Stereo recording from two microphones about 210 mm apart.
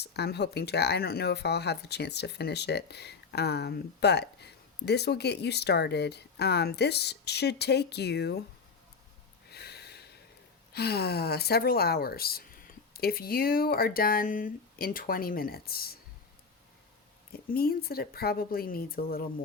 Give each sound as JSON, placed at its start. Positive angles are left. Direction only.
{"t": 0.0, "sound": "speech", "side_deg": 50}
{"t": 9.5, "sound": "snort", "side_deg": 50}
{"t": 10.7, "sound": "speech", "side_deg": 50}
{"t": 17.3, "sound": "speech", "side_deg": 45}